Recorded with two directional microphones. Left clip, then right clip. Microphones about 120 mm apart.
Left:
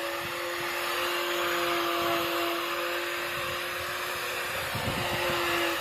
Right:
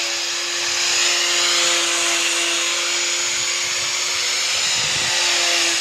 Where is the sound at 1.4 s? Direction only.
20° right (ahead or behind).